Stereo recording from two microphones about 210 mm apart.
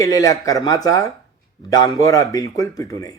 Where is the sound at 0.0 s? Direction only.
15° left (ahead or behind).